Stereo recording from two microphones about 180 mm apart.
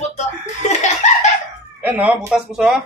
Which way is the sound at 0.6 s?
40° left (ahead or behind).